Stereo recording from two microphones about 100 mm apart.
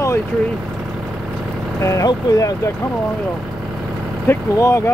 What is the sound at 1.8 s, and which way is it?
Speech, 35° left (ahead or behind).